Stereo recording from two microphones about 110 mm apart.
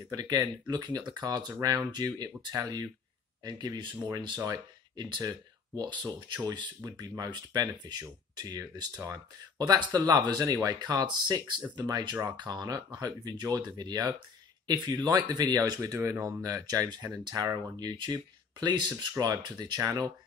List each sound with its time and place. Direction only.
0.1 s speech: 40° right (ahead or behind)